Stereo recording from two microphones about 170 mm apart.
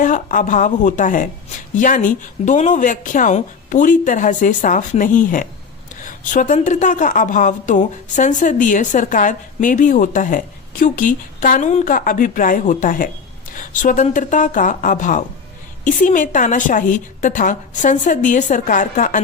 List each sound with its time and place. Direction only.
0.0 s a woman's voice: 50° left (ahead or behind)